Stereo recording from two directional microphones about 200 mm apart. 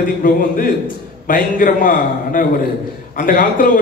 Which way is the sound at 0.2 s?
45° left (ahead or behind).